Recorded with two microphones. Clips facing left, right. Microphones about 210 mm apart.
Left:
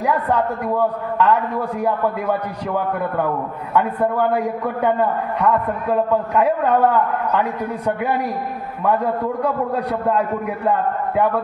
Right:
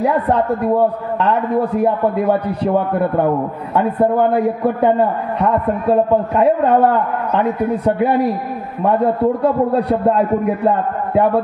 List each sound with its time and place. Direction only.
0.0 s a man's voice: 30° right (ahead or behind)